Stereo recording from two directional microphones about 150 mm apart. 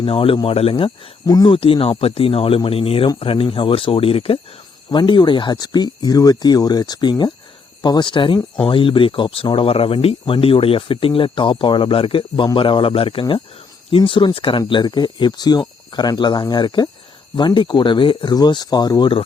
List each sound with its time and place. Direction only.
0.0 s speech: 35° left (ahead or behind)
1.3 s speech: 25° left (ahead or behind)
1.5 s speech: 35° left (ahead or behind)